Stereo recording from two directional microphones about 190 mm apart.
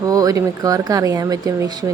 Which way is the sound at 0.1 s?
20° right (ahead or behind).